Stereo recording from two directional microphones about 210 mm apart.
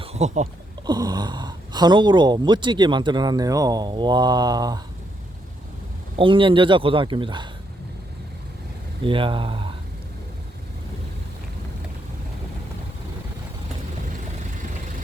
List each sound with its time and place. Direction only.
0.0 s a sound: 30° right (ahead or behind)
0.9 s speech: 20° right (ahead or behind)
6.1 s speech: 25° right (ahead or behind)
9.0 s speech: 25° right (ahead or behind)
14.6 s vehicle: 35° right (ahead or behind)